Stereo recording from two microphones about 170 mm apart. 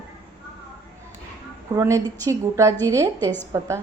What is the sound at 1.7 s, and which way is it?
A woman's voice, 20° right (ahead or behind).